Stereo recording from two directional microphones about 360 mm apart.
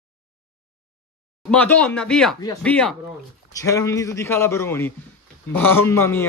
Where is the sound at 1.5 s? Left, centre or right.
Centre.